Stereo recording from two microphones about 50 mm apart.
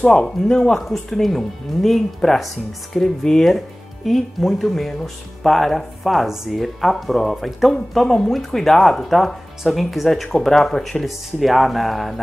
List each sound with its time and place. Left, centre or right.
0.0 s speech: centre
0.6 s speech: centre